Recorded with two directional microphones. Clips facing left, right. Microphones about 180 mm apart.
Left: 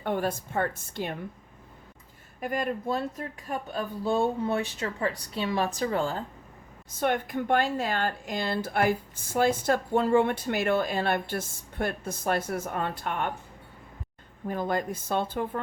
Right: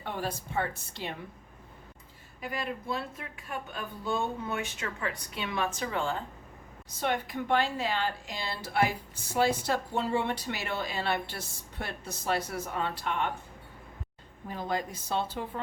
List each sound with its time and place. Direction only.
0.0 s speech: 50° left (ahead or behind)
2.4 s speech: 50° left (ahead or behind)
7.0 s speech: 50° left (ahead or behind)
14.4 s speech: 50° left (ahead or behind)